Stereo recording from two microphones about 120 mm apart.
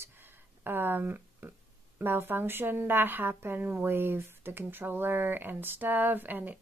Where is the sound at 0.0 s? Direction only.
20° right (ahead or behind).